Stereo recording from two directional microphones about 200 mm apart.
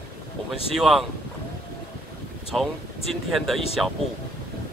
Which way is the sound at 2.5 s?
Centre (ahead or behind).